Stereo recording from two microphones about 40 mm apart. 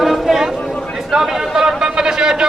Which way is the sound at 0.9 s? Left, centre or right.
Centre.